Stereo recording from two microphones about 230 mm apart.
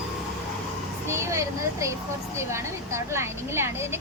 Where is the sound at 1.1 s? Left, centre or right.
Centre.